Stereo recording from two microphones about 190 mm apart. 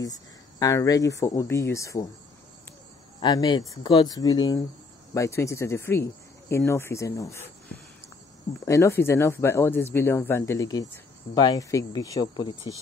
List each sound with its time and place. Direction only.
0.6 s speech: 15° left (ahead or behind)
3.2 s speech: 20° left (ahead or behind)
8.6 s speech: 15° left (ahead or behind)